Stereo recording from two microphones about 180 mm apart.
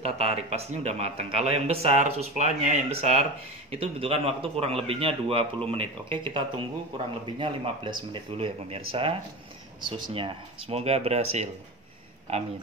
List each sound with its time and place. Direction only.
0.0 s a man's voice: 35° right (ahead or behind)